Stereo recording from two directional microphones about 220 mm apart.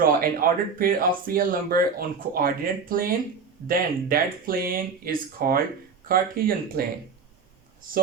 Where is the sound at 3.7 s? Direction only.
40° right (ahead or behind).